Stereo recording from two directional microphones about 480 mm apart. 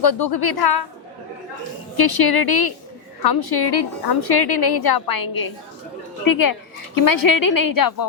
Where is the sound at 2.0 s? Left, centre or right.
Left.